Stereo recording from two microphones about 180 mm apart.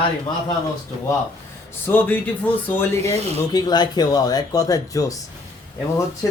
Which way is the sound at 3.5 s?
20° left (ahead or behind).